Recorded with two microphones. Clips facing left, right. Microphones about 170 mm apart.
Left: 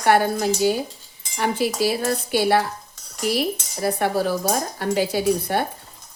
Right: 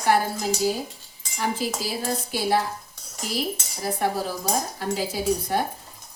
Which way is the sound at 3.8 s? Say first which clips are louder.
Left 5 dB; 70° left (ahead or behind).